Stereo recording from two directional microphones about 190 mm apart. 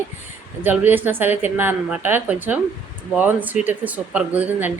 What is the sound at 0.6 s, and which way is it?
A woman's voice, 10° right (ahead or behind).